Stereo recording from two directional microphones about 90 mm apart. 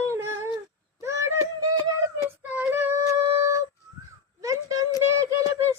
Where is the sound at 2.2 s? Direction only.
25° right (ahead or behind).